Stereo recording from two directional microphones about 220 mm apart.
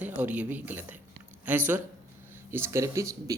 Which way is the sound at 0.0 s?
5° right (ahead or behind).